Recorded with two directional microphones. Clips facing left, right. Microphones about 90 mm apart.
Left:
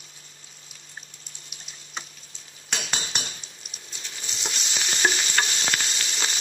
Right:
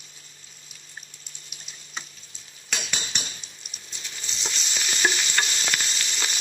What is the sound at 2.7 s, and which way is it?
Cutlery, 35° left (ahead or behind).